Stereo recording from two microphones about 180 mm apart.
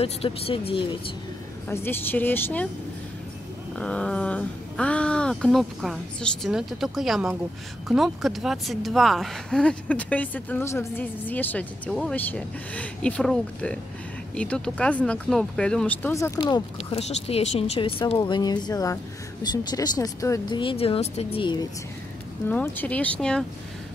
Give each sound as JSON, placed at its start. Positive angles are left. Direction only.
{"t": 0.0, "sound": "speech", "side_deg": 30}
{"t": 1.7, "sound": "speech", "side_deg": 10}
{"t": 3.7, "sound": "speech", "side_deg": 5}
{"t": 22.5, "sound": "speech", "side_deg": 10}